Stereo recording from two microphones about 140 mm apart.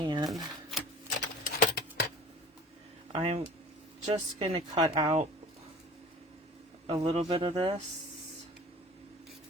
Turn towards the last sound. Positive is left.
turn(degrees=-45)  # may be behind; listen again after turning